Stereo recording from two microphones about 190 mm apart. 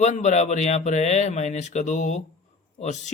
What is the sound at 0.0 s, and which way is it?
A man's voice, 40° left (ahead or behind).